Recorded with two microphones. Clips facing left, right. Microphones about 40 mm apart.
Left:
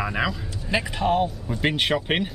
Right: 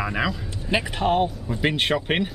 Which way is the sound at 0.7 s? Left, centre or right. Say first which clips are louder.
Right 1 dB; centre.